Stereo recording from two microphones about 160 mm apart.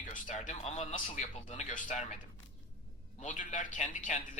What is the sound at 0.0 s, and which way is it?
A man's voice, 55° left (ahead or behind).